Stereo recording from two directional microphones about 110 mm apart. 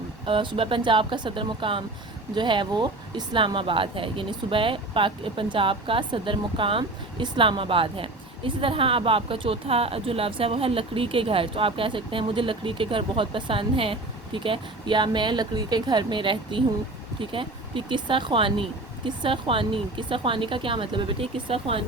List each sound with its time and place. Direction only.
0.3 s speech: 50° right (ahead or behind)